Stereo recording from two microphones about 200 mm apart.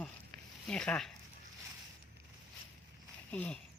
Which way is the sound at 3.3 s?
5° left (ahead or behind).